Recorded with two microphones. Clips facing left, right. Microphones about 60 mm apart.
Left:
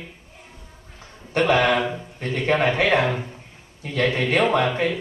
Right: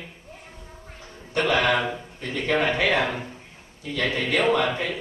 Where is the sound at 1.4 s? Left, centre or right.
Left.